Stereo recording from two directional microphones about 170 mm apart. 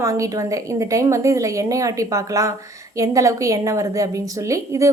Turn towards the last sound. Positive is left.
turn(degrees=-20)  # may be behind; listen again after turning